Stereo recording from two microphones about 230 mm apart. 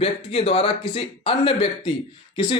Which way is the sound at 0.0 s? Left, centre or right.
Left.